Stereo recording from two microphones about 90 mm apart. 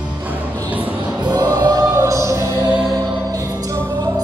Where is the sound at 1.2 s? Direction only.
50° right (ahead or behind).